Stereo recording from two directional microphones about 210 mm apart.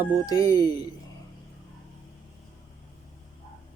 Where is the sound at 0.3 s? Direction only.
15° left (ahead or behind).